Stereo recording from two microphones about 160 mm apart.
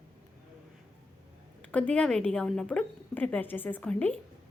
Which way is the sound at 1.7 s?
10° left (ahead or behind).